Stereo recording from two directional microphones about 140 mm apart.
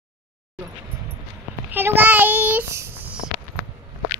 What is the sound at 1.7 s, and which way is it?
Child singing, 15° right (ahead or behind).